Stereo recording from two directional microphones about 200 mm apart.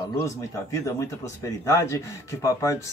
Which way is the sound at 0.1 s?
15° left (ahead or behind).